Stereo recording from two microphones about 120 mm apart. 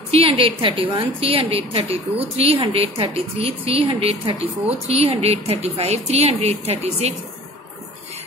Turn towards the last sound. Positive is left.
turn(degrees=-60)  # may be behind; listen again after turning